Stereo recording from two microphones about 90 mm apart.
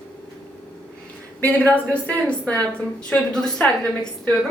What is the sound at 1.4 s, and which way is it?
A woman's voice, 20° left (ahead or behind).